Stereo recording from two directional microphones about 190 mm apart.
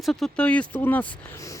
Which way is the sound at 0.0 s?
Centre (ahead or behind).